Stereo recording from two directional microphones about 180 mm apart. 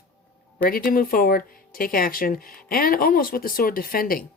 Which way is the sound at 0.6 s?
50° left (ahead or behind).